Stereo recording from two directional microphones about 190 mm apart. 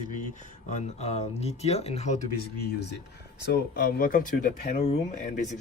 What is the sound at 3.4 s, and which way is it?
Speech, 55° left (ahead or behind).